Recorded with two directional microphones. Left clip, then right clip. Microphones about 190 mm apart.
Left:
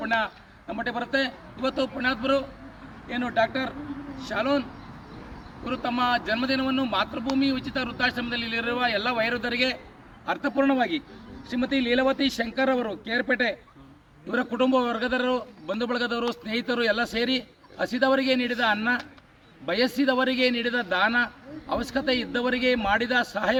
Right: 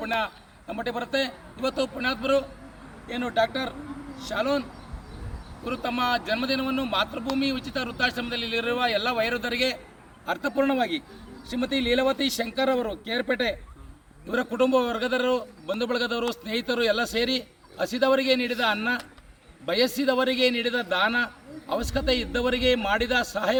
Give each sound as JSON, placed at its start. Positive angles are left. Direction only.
{"t": 0.0, "sound": "a man's voice", "side_deg": -25}
{"t": 5.6, "sound": "a man's voice", "side_deg": -25}